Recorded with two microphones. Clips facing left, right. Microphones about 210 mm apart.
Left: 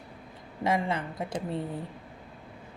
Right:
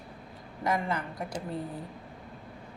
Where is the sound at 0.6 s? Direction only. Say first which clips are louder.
Left 2 dB; 25° left (ahead or behind).